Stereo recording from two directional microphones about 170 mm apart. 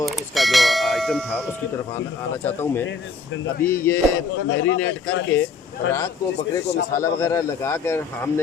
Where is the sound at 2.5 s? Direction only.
10° left (ahead or behind).